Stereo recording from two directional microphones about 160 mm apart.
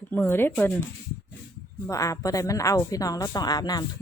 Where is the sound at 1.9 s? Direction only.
20° left (ahead or behind).